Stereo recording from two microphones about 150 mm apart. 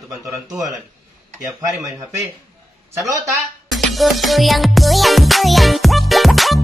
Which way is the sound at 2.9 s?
20° right (ahead or behind).